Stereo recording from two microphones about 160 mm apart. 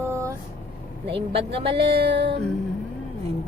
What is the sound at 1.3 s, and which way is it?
Music, 35° right (ahead or behind).